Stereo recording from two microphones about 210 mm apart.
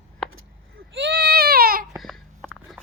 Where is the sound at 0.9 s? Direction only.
55° right (ahead or behind).